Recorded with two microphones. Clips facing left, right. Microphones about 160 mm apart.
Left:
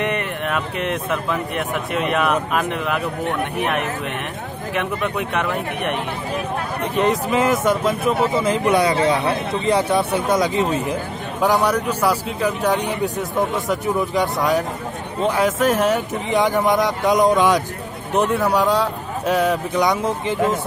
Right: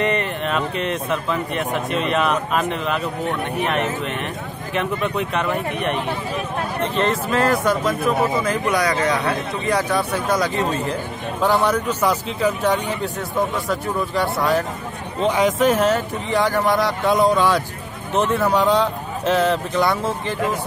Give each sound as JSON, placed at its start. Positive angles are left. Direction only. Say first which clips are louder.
{"t": 0.0, "sound": "speech", "louder": "right 2 dB", "side_deg": 10}
{"t": 4.7, "sound": "speech", "louder": "right 1 dB", "side_deg": 10}
{"t": 15.2, "sound": "speech", "louder": "right 1 dB", "side_deg": 10}